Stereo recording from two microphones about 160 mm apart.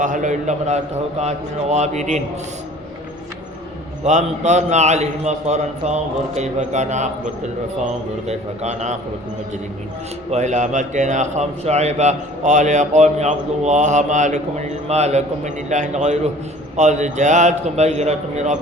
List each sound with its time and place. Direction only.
0.0 s a man's voice: 50° right (ahead or behind)
4.0 s a man's voice: 45° right (ahead or behind)
8.3 s a man's voice: 45° right (ahead or behind)
10.3 s a man's voice: 45° right (ahead or behind)